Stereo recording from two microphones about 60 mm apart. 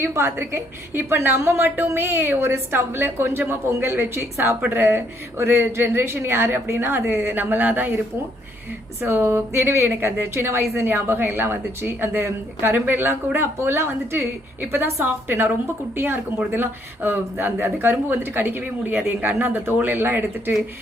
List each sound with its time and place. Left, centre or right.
0.0 s a woman's voice: right